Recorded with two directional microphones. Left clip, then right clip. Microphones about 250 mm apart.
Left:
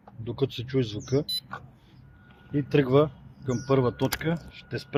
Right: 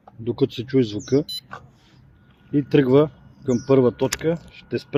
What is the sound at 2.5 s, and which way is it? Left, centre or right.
Speech, right.